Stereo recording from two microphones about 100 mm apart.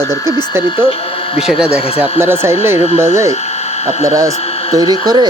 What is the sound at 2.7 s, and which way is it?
Speech, 90° left.